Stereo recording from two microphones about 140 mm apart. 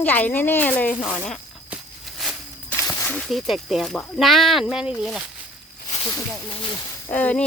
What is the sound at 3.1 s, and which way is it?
Speech, centre (ahead or behind).